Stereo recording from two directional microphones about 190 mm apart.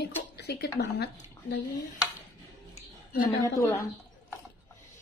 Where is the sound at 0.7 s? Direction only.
55° left (ahead or behind).